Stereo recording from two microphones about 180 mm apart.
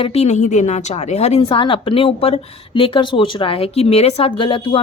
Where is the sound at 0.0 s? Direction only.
35° left (ahead or behind).